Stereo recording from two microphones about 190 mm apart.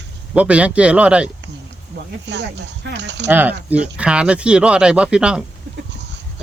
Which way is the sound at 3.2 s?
10° right (ahead or behind).